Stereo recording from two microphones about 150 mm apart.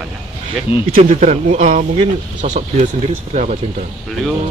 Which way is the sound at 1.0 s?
55° right (ahead or behind).